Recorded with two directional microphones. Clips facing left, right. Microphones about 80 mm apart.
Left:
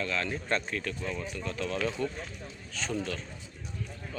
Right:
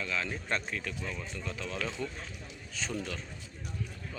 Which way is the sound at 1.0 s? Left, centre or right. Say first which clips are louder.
Left 4 dB; centre.